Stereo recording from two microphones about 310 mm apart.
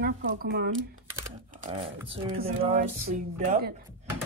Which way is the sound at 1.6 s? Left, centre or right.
Centre.